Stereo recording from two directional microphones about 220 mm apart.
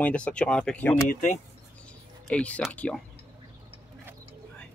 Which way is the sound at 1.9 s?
5° left (ahead or behind).